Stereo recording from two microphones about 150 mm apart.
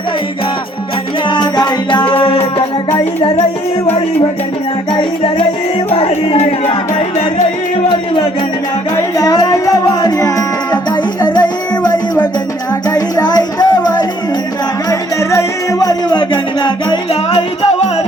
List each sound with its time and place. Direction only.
1.3 s music: 30° left (ahead or behind)
2.9 s music: 15° left (ahead or behind)
4.9 s music: 35° left (ahead or behind)
9.0 s music: 25° left (ahead or behind); by 18.0 s 45° left (ahead or behind)